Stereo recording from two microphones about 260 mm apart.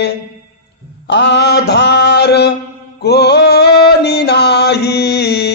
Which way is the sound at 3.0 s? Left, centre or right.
Left.